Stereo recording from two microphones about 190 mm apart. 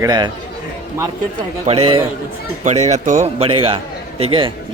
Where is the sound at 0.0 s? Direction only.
20° right (ahead or behind).